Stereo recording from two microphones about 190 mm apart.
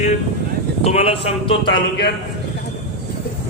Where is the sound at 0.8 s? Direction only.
30° left (ahead or behind).